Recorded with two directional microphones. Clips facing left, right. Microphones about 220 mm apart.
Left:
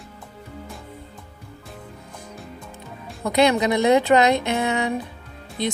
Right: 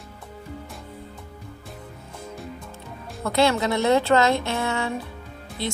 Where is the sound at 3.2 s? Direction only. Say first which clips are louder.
Left 3 dB; 15° left (ahead or behind).